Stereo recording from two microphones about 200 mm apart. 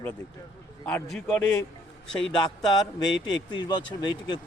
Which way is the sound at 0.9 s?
5° left (ahead or behind).